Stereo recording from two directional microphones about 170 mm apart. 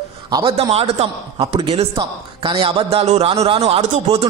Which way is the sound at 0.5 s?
35° right (ahead or behind).